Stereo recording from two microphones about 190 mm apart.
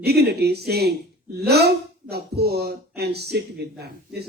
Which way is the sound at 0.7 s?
55° right (ahead or behind).